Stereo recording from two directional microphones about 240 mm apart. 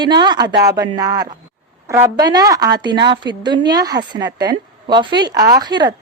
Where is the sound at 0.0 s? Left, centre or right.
Centre.